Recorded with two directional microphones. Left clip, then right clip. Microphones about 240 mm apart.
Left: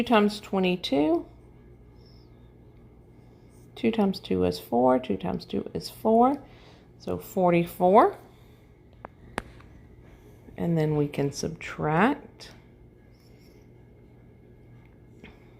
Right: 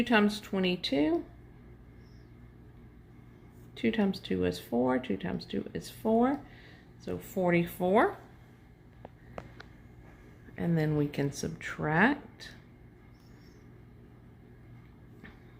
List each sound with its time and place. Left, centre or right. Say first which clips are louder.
0.0 s speech: left 4 dB; left
3.8 s speech: left 5 dB; left
10.5 s speech: left 5 dB; centre
11.4 s speech: left 4 dB; centre
11.9 s speech: left 3 dB; centre